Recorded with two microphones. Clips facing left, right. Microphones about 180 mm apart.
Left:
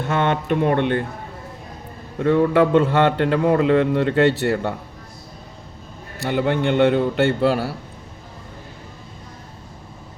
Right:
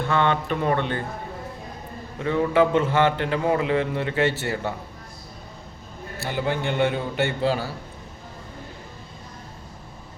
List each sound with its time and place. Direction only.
0.1 s a man's voice: 50° left (ahead or behind)
2.1 s a man's voice: 55° left (ahead or behind)
6.2 s a man's voice: 60° left (ahead or behind)